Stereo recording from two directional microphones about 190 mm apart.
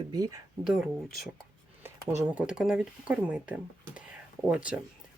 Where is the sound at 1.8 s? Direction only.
10° right (ahead or behind).